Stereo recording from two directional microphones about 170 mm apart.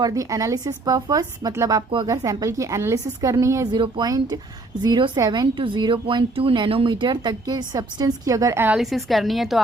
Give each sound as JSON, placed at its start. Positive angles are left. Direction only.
{"t": 0.0, "sound": "a woman's voice", "side_deg": -20}